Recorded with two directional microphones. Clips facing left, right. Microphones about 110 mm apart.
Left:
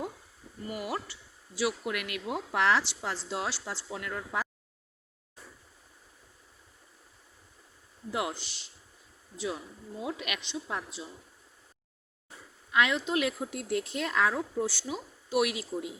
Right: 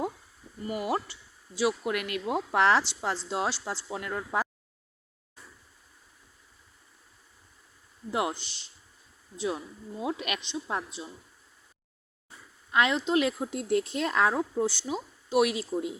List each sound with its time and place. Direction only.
0.7 s a woman's voice: 25° right (ahead or behind)
8.1 s a woman's voice: 30° right (ahead or behind)
10.0 s speech: 30° right (ahead or behind)
12.7 s a woman's voice: 30° right (ahead or behind)